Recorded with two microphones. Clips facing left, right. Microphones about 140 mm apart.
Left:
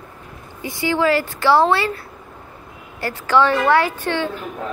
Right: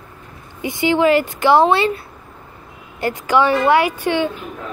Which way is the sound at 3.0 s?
15° right (ahead or behind).